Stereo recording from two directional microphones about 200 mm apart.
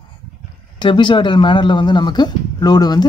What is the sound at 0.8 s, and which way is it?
Speech, 25° left (ahead or behind).